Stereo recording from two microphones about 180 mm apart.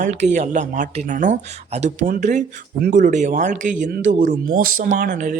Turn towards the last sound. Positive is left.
turn(degrees=-45)  # may be behind; listen again after turning